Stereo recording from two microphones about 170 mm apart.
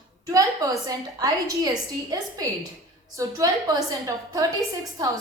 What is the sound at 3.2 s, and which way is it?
A woman's voice, 20° right (ahead or behind).